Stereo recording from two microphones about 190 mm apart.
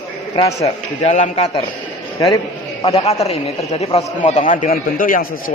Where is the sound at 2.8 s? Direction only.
30° left (ahead or behind).